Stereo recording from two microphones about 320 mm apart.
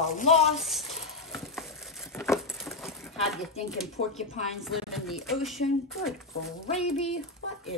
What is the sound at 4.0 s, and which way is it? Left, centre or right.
Speech, left.